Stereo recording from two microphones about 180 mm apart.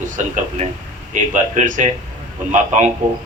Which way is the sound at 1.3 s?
45° right (ahead or behind).